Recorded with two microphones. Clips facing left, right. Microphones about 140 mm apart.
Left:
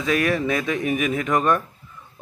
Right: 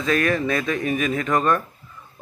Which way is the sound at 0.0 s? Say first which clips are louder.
Even; 10° left (ahead or behind).